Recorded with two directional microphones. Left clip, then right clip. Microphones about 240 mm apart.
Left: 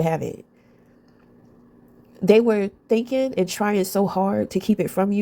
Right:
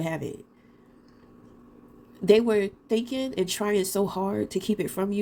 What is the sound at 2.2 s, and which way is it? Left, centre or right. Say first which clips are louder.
Speech: left 4 dB; left.